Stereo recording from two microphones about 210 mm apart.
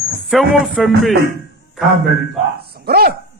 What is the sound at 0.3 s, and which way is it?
Speech, centre (ahead or behind).